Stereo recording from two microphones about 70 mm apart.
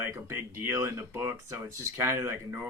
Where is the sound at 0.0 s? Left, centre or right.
Right.